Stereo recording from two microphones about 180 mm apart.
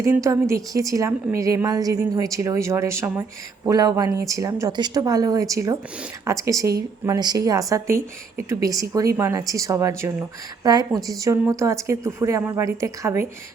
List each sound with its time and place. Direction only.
0.0 s a woman's voice: 15° right (ahead or behind)